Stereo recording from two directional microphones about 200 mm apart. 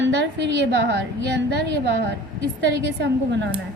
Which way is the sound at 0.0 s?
65° right (ahead or behind).